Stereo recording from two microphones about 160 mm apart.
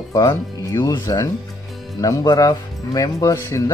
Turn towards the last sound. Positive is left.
turn(degrees=20)  # may be behind; listen again after turning